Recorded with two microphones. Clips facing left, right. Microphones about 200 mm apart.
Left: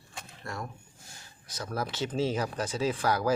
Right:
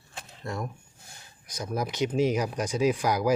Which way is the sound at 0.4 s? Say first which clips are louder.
Right 5 dB; 20° right (ahead or behind).